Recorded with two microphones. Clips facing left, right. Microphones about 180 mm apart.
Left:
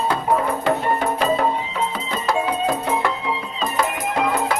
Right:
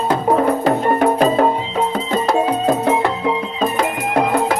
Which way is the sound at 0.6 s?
50° right (ahead or behind).